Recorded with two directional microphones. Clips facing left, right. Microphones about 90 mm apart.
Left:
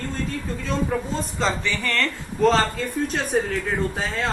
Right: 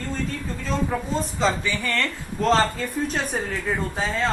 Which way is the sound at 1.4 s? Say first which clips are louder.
Even; 10° right (ahead or behind).